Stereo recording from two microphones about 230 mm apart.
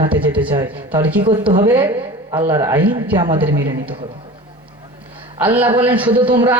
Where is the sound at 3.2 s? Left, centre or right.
Right.